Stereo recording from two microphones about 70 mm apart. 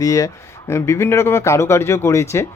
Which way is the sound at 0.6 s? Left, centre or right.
Left.